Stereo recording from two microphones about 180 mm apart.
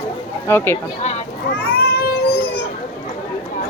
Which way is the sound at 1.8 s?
60° left (ahead or behind).